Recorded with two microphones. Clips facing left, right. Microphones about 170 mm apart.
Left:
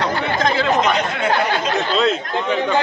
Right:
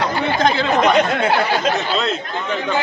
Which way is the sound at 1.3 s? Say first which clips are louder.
Right 1 dB; 10° right (ahead or behind).